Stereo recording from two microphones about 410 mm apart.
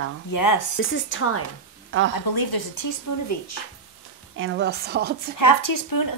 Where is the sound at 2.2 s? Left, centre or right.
Left.